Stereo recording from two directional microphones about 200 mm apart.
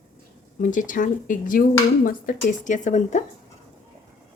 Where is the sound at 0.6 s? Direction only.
40° left (ahead or behind).